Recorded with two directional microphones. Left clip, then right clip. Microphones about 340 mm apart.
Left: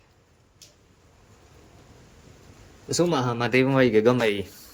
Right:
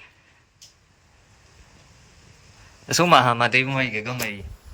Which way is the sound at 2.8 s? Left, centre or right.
Centre.